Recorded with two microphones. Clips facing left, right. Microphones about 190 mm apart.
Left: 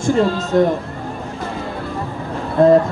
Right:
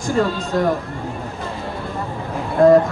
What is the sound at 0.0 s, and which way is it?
Speech, 25° left (ahead or behind).